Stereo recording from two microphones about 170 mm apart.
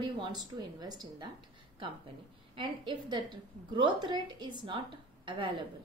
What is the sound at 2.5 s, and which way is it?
Speech, 30° right (ahead or behind).